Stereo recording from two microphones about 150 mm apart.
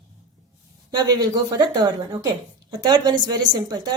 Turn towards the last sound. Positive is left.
turn(degrees=-30)  # may be behind; listen again after turning